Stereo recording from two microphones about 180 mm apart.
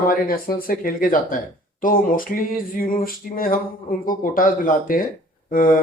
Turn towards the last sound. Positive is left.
turn(degrees=50)  # may be behind; listen again after turning